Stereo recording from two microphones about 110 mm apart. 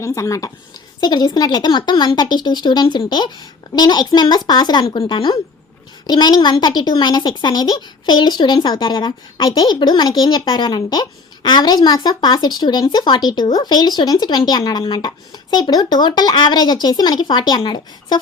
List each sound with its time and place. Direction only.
0.0 s a woman's voice: 30° left (ahead or behind)